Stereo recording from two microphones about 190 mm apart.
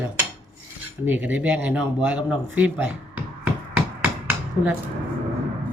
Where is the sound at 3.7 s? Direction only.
10° right (ahead or behind).